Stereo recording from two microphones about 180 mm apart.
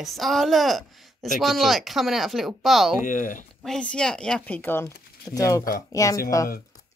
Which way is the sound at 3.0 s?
45° left (ahead or behind).